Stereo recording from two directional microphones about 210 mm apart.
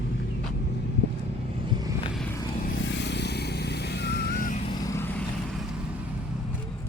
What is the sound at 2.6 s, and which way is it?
Vehicle, 55° left (ahead or behind).